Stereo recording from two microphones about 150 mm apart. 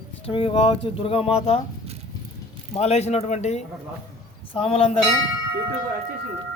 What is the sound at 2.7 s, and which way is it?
A man's voice, 45° left (ahead or behind).